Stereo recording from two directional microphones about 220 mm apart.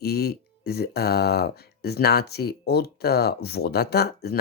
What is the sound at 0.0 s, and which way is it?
Speech, 45° left (ahead or behind).